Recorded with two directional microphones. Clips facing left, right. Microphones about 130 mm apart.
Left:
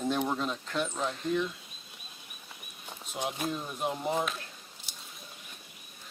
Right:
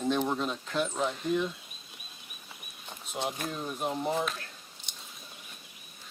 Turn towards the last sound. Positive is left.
turn(degrees=5)  # may be behind; listen again after turning